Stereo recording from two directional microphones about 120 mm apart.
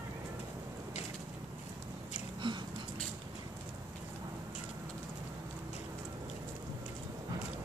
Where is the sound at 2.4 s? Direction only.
40° right (ahead or behind).